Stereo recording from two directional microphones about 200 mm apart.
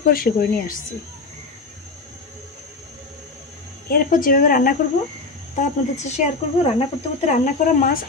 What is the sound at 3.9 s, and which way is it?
Speech, 45° left (ahead or behind).